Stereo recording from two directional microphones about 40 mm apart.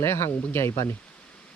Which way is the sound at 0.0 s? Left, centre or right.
Left.